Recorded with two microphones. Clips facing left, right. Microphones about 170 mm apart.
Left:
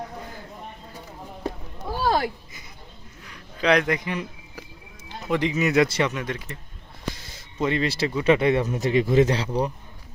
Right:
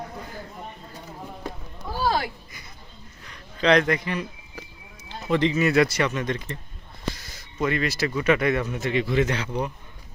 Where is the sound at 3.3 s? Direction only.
10° left (ahead or behind).